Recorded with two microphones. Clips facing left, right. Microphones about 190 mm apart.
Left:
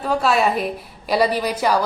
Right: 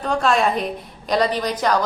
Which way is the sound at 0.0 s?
5° left (ahead or behind).